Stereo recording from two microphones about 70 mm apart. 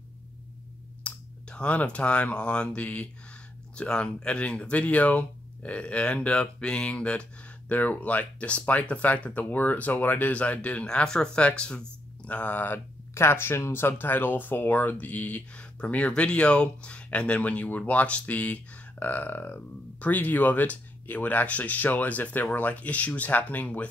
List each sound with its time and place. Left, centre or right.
1.0 s speech: centre